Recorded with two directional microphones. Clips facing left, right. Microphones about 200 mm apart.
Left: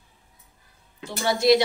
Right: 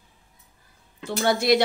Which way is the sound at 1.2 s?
55° right (ahead or behind).